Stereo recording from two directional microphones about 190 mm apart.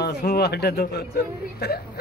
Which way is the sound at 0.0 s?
60° left (ahead or behind).